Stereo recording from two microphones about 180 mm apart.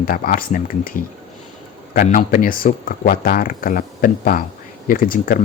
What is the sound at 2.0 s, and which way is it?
Speech, 50° left (ahead or behind).